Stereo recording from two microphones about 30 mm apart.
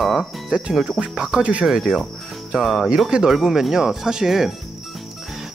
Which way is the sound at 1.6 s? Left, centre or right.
Centre.